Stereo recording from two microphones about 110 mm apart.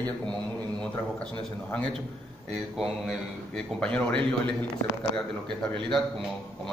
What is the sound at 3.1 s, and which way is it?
A man's voice, 5° left (ahead or behind).